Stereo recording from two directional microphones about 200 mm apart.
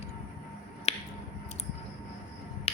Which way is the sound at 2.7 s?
30° left (ahead or behind).